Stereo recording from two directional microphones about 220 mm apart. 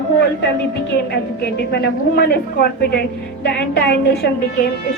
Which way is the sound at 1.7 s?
50° left (ahead or behind).